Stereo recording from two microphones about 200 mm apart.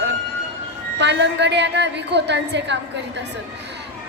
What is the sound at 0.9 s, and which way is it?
A woman's voice, 60° right (ahead or behind).